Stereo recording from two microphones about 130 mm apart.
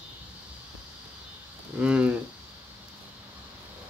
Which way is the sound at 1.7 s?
10° right (ahead or behind).